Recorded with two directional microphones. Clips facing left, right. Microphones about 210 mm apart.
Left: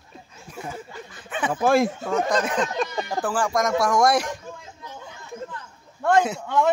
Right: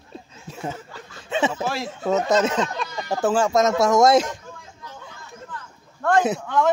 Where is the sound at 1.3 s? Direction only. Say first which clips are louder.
Left 3 dB; 25° right (ahead or behind).